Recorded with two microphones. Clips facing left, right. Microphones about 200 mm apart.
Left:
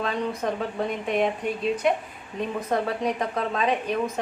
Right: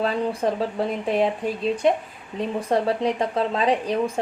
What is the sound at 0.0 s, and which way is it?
Speech, 35° right (ahead or behind).